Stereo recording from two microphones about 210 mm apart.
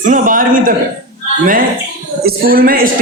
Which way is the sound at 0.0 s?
40° right (ahead or behind).